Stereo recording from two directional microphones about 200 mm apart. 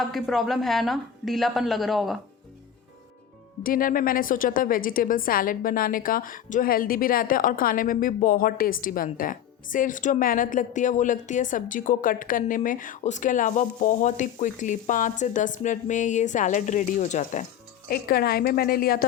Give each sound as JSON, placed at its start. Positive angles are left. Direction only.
{"t": 0.0, "sound": "a woman's voice", "side_deg": 0}
{"t": 3.6, "sound": "a woman's voice", "side_deg": 45}
{"t": 17.8, "sound": "a woman's voice", "side_deg": 50}